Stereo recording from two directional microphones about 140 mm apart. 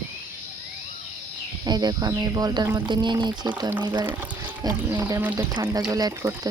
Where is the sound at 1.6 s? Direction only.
30° right (ahead or behind).